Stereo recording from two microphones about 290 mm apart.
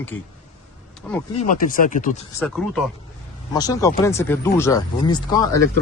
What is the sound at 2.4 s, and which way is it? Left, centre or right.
Speech, centre.